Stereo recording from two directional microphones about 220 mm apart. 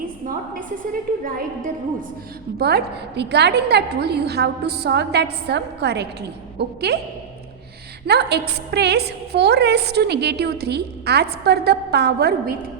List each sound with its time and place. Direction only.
2.6 s a woman's voice: 45° right (ahead or behind)
8.0 s a woman's voice: 50° right (ahead or behind)